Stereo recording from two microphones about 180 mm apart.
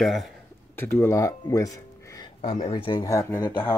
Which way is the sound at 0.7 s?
10° left (ahead or behind).